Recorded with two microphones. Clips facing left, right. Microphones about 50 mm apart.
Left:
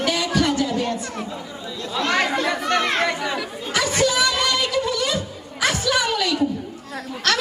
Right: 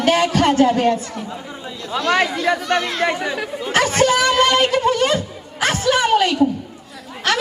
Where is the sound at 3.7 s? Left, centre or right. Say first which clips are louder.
Right 5 dB; right.